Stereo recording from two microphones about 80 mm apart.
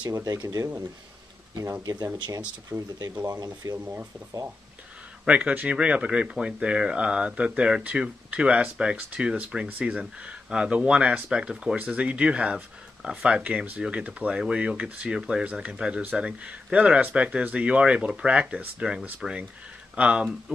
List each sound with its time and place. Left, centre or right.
0.1 s speech: right
1.8 s speech: right
2.7 s speech: centre
3.3 s speech: right
3.7 s speech: right
5.2 s speech: centre